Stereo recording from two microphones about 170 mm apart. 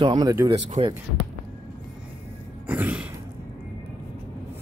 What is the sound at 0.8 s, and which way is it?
Speech, 40° right (ahead or behind).